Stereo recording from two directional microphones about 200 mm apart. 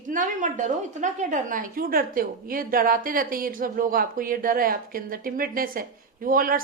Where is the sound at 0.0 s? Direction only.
40° right (ahead or behind).